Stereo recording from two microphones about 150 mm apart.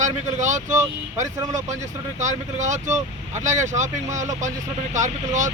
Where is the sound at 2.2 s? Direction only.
55° right (ahead or behind).